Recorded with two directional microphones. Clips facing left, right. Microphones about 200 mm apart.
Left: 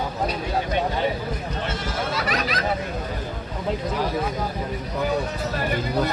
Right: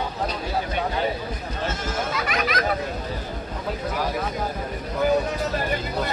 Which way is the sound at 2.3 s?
35° left (ahead or behind).